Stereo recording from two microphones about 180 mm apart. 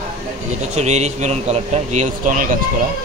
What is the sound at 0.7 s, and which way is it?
A man's voice, 40° right (ahead or behind).